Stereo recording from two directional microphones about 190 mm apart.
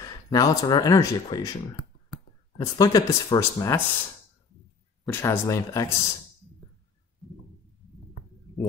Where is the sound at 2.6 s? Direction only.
15° left (ahead or behind).